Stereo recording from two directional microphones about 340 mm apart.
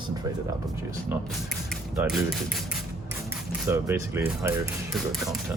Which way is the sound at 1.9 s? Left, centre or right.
Centre.